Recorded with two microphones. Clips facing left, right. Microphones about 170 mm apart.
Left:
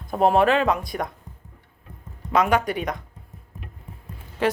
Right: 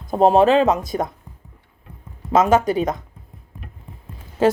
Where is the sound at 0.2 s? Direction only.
25° right (ahead or behind).